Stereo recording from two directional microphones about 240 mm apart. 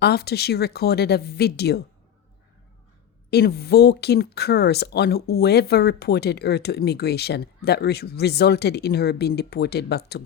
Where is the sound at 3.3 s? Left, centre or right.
Left.